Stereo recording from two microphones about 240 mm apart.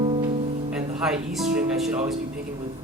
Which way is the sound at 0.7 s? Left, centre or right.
Centre.